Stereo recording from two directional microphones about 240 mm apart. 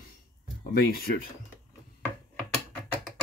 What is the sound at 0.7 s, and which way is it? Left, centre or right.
Speech, left.